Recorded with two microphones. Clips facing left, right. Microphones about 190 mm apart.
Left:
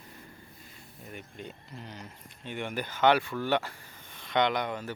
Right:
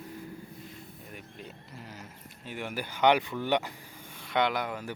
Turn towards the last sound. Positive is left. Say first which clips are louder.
# left 1 dB
turn(degrees=-5)  # may be behind; listen again after turning